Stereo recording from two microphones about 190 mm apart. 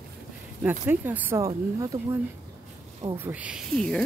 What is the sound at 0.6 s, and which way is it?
Speech, 10° right (ahead or behind).